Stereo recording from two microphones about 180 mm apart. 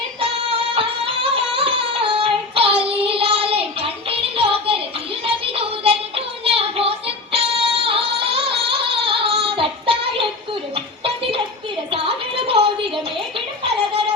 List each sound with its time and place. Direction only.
0.2 s music: 30° right (ahead or behind)
5.2 s child singing: 30° right (ahead or behind)
7.3 s music: 30° right (ahead or behind)